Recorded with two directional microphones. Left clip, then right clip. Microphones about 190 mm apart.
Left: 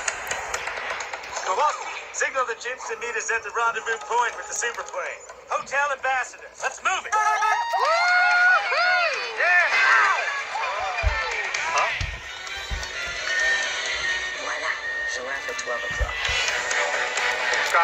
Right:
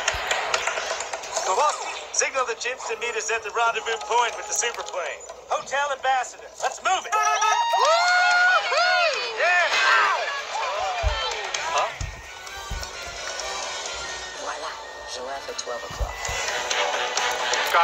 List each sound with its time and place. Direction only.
0.0 s a sound: 35° right (ahead or behind)
3.5 s speech: 15° right (ahead or behind)
5.5 s a man's voice: 35° right (ahead or behind)
7.2 s crowd: 25° right (ahead or behind)
13.3 s music: 10° right (ahead or behind)